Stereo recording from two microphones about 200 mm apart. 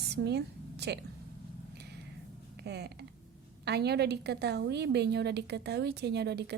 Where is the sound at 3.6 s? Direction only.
55° right (ahead or behind).